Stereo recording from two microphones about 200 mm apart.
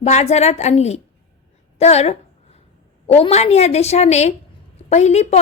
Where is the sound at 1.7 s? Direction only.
30° left (ahead or behind).